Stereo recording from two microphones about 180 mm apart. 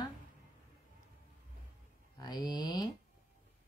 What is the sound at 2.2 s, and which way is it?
Speech, 25° left (ahead or behind).